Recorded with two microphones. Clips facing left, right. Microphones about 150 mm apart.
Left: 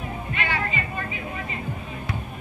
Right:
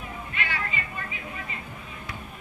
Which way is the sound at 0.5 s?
25° left (ahead or behind).